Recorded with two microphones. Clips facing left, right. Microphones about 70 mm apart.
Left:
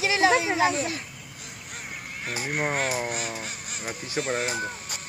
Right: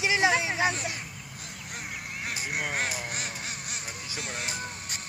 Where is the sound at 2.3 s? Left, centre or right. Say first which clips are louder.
Left 5 dB; left.